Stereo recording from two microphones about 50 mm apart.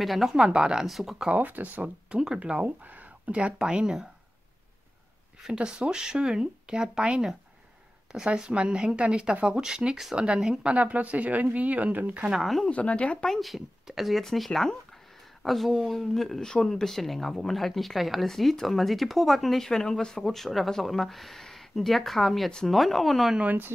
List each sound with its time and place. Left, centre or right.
0.0 s speech: centre
0.8 s speech: centre
1.3 s speech: right
2.1 s speech: centre
2.8 s a sound: right
3.5 s speech: centre
5.5 s speech: centre; by 12.3 s right
12.3 s speech: centre
12.6 s speech: left
13.3 s speech: centre
23.4 s speech: right